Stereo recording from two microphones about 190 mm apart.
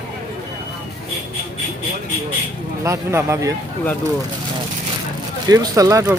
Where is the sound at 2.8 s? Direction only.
15° right (ahead or behind).